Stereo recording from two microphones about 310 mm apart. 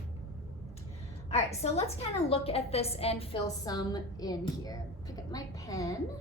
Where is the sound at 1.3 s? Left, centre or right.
Left.